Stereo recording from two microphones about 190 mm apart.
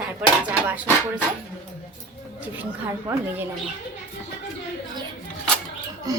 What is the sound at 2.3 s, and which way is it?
Speech, 10° right (ahead or behind).